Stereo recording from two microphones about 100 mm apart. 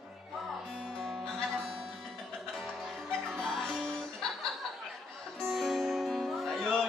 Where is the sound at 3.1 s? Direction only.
5° left (ahead or behind).